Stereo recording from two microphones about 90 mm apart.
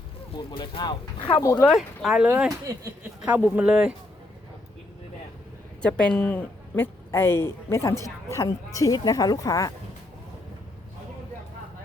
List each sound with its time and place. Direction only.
0.3 s speech: 65° left (ahead or behind)
1.4 s speech: 40° left (ahead or behind)
1.7 s speech: 5° right (ahead or behind)
2.5 s speech: 35° right (ahead or behind)
3.2 s speech: 20° right (ahead or behind)
5.8 s a woman's voice: 10° left (ahead or behind); by 9.7 s 40° left (ahead or behind)